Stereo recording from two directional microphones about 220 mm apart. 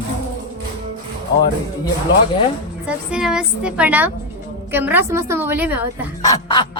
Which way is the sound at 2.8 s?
5° right (ahead or behind).